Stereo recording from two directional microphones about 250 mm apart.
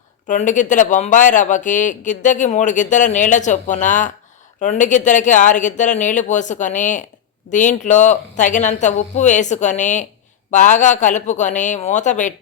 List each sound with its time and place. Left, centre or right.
0.3 s speech: left